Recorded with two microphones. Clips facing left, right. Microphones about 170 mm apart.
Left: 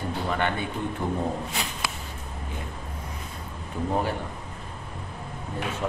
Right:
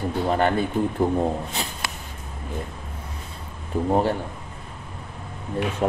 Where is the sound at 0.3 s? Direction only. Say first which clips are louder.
Right 7 dB; 40° right (ahead or behind).